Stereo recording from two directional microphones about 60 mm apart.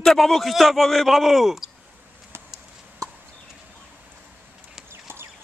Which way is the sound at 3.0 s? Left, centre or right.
Right.